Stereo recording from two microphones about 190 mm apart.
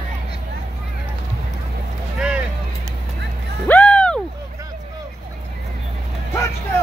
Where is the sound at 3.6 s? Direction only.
5° left (ahead or behind).